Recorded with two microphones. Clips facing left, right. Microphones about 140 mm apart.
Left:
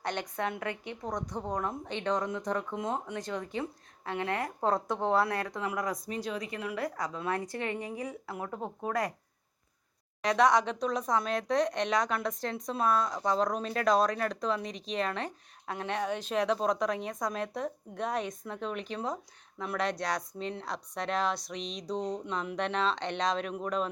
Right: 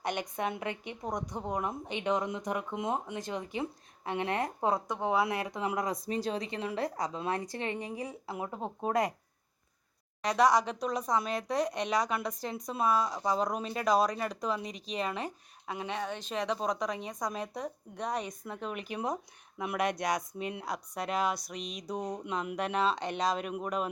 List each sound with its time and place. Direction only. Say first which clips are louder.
0.0 s a woman's voice: even; 15° right (ahead or behind)
4.6 s speech: left 4 dB; 5° right (ahead or behind); by 8.1 s 30° right (ahead or behind)
8.3 s speech: even; 20° right (ahead or behind)
10.2 s speech: left 1 dB; centre (ahead or behind)